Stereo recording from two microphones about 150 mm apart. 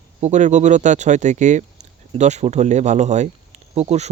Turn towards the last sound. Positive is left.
turn(degrees=-45)  # may be behind; listen again after turning